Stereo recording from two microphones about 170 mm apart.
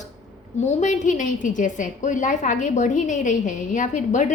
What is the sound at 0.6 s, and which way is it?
A woman's voice, 45° left (ahead or behind).